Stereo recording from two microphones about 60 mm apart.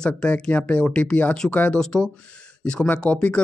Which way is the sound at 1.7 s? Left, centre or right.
Centre.